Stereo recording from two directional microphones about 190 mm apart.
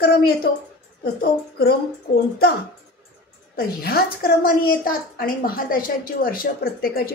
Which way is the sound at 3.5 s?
55° left (ahead or behind).